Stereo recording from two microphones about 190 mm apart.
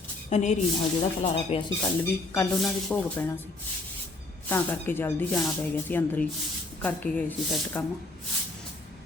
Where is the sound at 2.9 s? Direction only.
5° left (ahead or behind).